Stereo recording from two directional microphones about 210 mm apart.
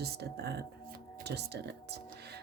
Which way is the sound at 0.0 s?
50° right (ahead or behind).